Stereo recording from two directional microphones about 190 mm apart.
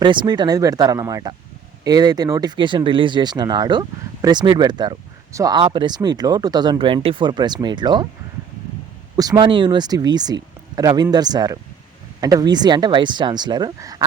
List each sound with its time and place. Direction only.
0.0 s speech: 25° right (ahead or behind)
9.1 s speech: 20° right (ahead or behind)